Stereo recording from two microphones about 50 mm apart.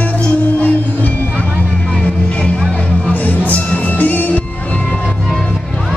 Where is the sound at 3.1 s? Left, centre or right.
Left.